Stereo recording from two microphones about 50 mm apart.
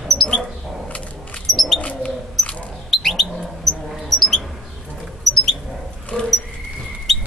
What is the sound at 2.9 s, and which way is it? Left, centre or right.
Bird, centre.